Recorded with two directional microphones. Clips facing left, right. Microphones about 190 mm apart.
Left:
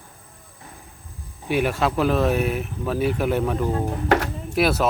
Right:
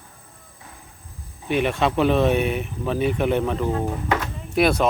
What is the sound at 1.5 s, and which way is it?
Speech, 5° left (ahead or behind).